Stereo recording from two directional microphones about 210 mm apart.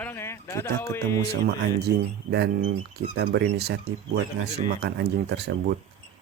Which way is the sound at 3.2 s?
50° right (ahead or behind).